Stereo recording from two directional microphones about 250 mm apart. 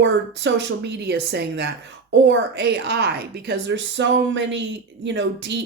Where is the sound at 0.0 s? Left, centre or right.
Right.